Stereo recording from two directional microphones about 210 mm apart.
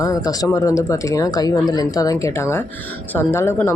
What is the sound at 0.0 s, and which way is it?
Speech, 15° left (ahead or behind).